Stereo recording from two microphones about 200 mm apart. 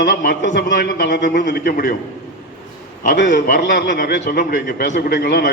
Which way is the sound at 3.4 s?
40° left (ahead or behind).